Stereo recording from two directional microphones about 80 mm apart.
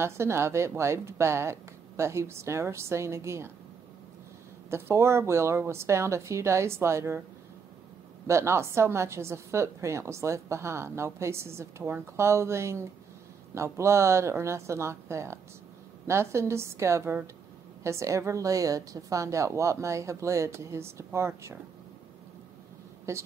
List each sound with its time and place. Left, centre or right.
0.0 s a woman's voice: right
4.6 s a woman's voice: right
8.3 s a woman's voice: right
23.1 s a woman's voice: right